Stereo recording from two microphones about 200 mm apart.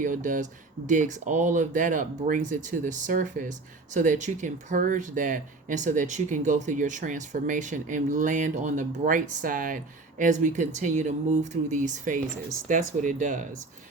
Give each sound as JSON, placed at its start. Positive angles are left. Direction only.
{"t": 0.0, "sound": "speech", "side_deg": -40}